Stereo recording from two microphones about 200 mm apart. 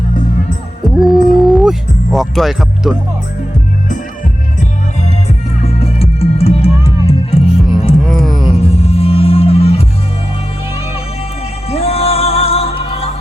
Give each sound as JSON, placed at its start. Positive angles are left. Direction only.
{"t": 0.9, "sound": "music", "side_deg": 0}
{"t": 5.6, "sound": "music", "side_deg": 30}
{"t": 8.0, "sound": "music", "side_deg": 0}
{"t": 8.6, "sound": "music", "side_deg": 30}
{"t": 11.7, "sound": "music", "side_deg": 30}